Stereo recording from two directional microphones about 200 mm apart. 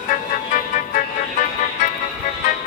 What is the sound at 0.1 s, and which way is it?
Music, 40° left (ahead or behind).